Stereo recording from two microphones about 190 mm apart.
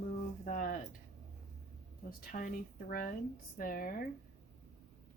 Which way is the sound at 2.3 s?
45° left (ahead or behind).